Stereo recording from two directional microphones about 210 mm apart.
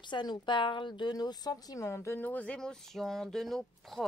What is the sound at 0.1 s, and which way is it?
A woman's voice, 20° left (ahead or behind).